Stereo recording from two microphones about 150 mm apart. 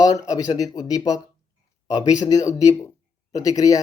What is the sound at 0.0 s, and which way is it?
Speech, 25° left (ahead or behind).